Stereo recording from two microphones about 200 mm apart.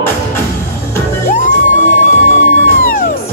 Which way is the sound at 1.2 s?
40° left (ahead or behind).